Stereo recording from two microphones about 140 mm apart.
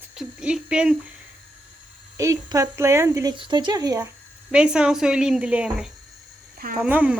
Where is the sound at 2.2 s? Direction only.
25° right (ahead or behind).